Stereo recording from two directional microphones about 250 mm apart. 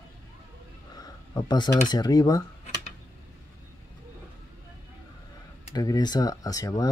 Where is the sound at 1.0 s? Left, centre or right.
Centre.